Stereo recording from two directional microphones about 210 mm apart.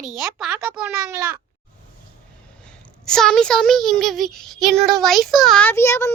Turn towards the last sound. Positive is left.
turn(degrees=15)  # may be behind; listen again after turning